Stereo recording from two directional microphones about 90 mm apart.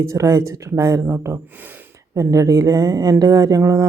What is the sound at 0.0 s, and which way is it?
Speech, 35° right (ahead or behind).